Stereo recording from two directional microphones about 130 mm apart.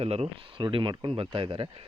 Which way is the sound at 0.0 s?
50° right (ahead or behind).